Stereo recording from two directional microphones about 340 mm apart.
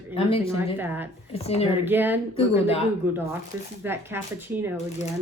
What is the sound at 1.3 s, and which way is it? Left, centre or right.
Speech, centre.